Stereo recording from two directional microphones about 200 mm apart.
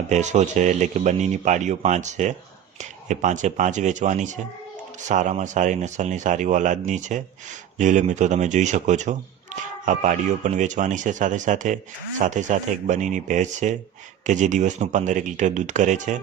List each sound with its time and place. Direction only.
0.1 s speech: 35° right (ahead or behind)